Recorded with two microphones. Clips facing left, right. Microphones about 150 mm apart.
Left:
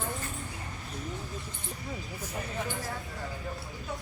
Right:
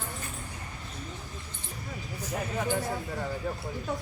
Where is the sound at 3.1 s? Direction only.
90° right.